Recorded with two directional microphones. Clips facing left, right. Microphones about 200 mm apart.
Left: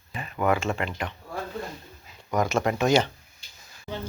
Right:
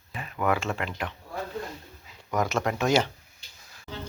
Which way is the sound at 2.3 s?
Centre (ahead or behind).